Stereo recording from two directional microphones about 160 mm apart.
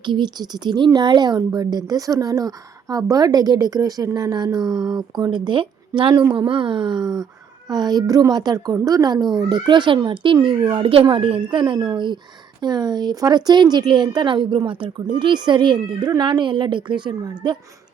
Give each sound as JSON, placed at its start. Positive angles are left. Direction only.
{"t": 0.0, "sound": "a woman's voice", "side_deg": -30}